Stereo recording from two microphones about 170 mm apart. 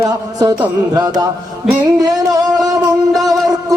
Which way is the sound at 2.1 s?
20° right (ahead or behind).